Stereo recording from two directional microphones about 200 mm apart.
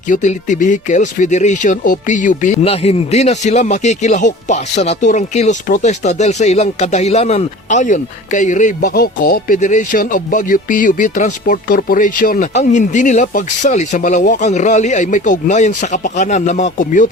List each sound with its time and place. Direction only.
0.1 s speech: 40° left (ahead or behind)